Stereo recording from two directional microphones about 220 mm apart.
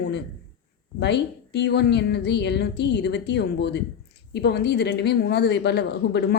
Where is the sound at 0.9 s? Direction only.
50° left (ahead or behind).